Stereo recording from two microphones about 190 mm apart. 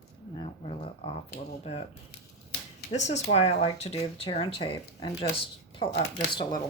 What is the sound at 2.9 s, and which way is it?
Speech, 40° left (ahead or behind).